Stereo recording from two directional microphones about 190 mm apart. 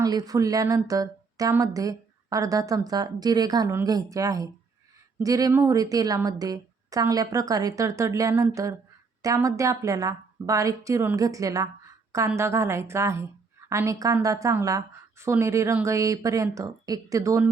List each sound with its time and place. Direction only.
0.0 s a woman's voice: 20° right (ahead or behind)